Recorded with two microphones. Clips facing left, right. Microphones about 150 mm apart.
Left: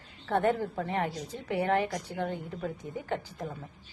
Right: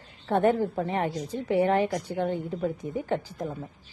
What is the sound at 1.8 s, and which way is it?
Speech, 10° right (ahead or behind).